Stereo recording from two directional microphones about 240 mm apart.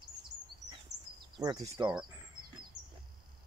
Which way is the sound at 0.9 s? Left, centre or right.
Right.